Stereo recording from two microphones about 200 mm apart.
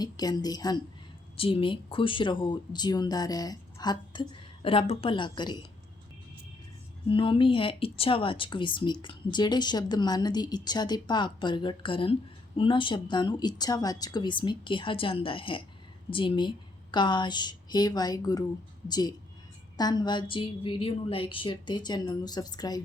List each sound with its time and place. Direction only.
0.0 s speech: 20° left (ahead or behind)
7.1 s speech: 25° left (ahead or behind)